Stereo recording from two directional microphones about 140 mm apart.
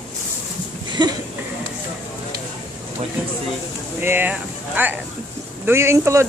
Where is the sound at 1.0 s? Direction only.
30° right (ahead or behind).